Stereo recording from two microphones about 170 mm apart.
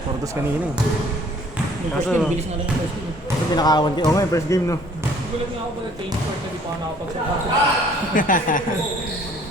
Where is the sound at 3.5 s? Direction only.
25° left (ahead or behind).